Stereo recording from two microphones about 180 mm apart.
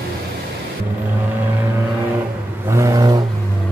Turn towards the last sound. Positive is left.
turn(degrees=-20)  # may be behind; listen again after turning